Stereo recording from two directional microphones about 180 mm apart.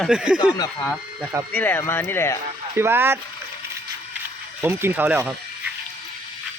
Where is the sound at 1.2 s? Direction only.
15° right (ahead or behind).